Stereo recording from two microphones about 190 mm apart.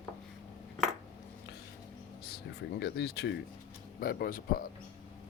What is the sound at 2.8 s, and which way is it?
Speech, 60° left (ahead or behind).